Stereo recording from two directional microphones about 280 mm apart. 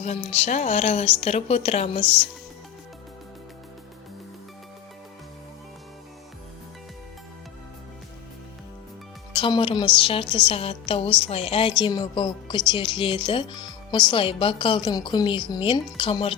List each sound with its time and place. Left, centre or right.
0.0 s a woman's voice: left
9.3 s a woman's voice: centre